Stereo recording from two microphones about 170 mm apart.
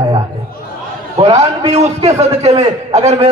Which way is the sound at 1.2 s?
35° right (ahead or behind).